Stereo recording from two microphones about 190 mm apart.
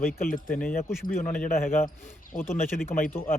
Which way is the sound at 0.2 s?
45° left (ahead or behind).